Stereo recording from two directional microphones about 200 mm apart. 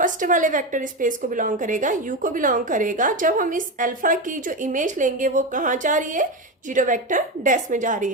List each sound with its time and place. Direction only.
0.0 s a woman's voice: 40° right (ahead or behind)